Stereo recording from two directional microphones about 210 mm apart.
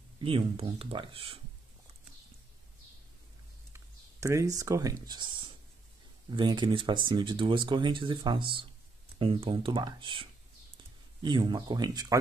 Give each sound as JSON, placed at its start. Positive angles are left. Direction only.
{"t": 0.2, "sound": "speech", "side_deg": -25}
{"t": 3.7, "sound": "speech", "side_deg": -15}
{"t": 11.2, "sound": "speech", "side_deg": -20}